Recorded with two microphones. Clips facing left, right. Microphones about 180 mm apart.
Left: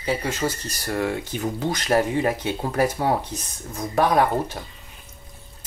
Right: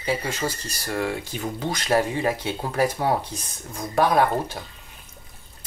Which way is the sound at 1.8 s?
10° left (ahead or behind).